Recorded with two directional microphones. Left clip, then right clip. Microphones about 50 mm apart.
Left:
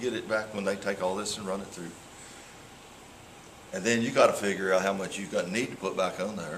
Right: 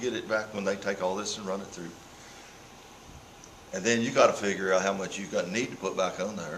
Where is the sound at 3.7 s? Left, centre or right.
Centre.